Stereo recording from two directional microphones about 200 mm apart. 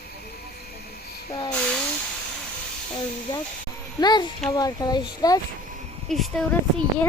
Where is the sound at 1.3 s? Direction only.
20° left (ahead or behind).